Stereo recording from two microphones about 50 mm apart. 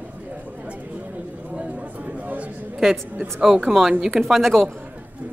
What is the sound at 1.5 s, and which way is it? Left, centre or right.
Chatter, right.